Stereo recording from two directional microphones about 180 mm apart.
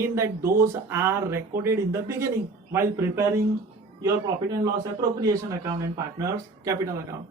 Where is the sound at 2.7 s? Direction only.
15° right (ahead or behind).